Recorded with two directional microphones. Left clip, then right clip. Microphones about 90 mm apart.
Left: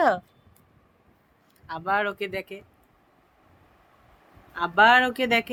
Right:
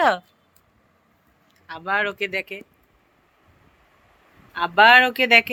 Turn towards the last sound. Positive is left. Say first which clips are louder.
# right 7 dB
turn(degrees=10)  # may be behind; listen again after turning